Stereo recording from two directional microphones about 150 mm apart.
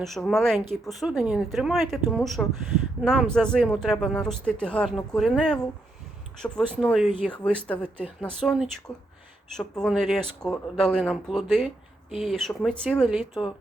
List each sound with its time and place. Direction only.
0.0 s speech: centre (ahead or behind)
6.4 s speech: 15° left (ahead or behind)
6.7 s speech: centre (ahead or behind)